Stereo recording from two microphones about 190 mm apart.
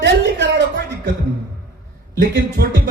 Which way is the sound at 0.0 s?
65° right (ahead or behind).